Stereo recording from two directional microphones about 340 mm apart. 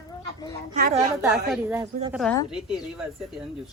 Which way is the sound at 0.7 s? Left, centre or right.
Right.